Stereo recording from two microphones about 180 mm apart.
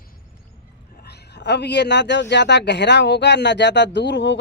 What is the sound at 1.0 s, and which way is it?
A man's voice, 65° left (ahead or behind).